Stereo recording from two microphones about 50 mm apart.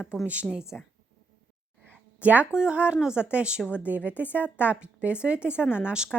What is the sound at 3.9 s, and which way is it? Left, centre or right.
A woman's voice, right.